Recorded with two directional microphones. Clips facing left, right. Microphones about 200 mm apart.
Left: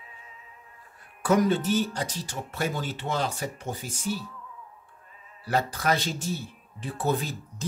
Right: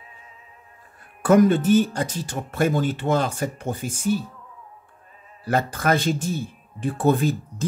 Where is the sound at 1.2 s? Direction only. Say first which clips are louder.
Right 7 dB; 50° right (ahead or behind).